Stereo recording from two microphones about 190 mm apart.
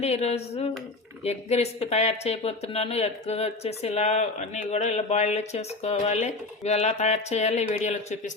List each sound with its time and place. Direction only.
0.0 s speech: 35° left (ahead or behind)